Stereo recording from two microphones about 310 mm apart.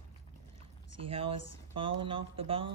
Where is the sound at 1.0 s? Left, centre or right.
Centre.